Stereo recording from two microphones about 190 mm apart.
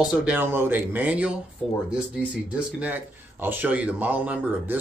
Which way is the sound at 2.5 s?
10° right (ahead or behind).